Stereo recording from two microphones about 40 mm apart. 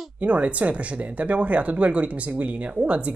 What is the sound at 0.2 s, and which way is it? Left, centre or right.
Speech, right.